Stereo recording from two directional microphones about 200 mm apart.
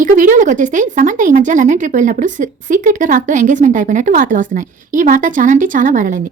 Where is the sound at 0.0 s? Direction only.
40° right (ahead or behind).